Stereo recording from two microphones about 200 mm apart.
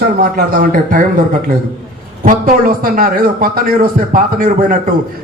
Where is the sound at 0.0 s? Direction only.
45° right (ahead or behind).